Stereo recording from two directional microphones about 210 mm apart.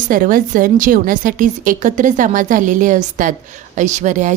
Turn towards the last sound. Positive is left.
turn(degrees=-35)  # may be behind; listen again after turning